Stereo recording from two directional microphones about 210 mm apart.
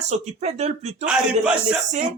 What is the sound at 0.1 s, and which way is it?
Speech, 30° right (ahead or behind).